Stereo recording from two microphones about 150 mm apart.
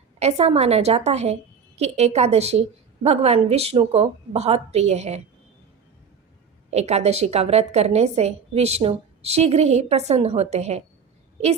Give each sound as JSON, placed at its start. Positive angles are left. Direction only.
{"t": 0.2, "sound": "a woman's voice", "side_deg": -45}
{"t": 6.7, "sound": "a woman's voice", "side_deg": -45}